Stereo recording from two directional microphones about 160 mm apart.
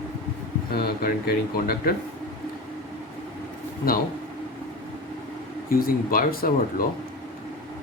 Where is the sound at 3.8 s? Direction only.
65° left (ahead or behind).